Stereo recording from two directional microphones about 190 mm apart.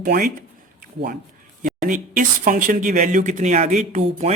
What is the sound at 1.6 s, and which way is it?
Speech, 45° right (ahead or behind).